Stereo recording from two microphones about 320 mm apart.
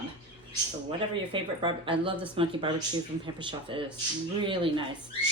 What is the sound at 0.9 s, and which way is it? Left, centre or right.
Speech, centre.